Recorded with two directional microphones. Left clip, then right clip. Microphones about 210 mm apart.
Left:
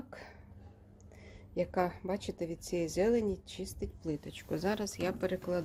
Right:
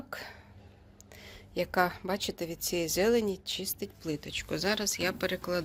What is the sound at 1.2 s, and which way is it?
Speech, 5° left (ahead or behind).